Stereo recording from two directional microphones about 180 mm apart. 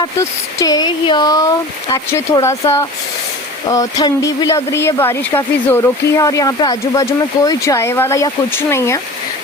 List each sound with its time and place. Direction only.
0.2 s speech: 20° left (ahead or behind)